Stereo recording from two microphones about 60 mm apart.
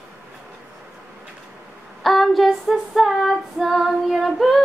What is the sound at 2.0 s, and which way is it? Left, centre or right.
Female singing, centre.